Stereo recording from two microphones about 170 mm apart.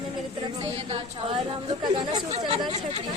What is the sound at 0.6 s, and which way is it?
Speech, 35° right (ahead or behind).